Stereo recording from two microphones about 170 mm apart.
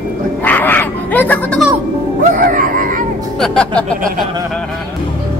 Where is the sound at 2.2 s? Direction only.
50° right (ahead or behind).